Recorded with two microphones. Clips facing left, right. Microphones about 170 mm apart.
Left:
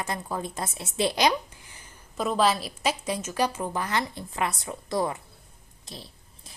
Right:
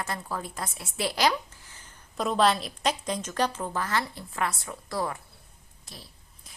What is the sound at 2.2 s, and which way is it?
A woman's voice, centre (ahead or behind).